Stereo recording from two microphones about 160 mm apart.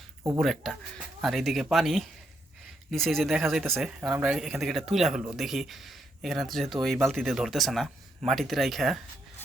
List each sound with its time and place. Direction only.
0.2 s speech: 15° right (ahead or behind)
0.4 s speech: centre (ahead or behind)